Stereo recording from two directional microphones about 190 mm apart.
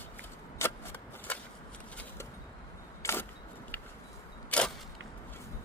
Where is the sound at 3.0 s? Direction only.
15° left (ahead or behind).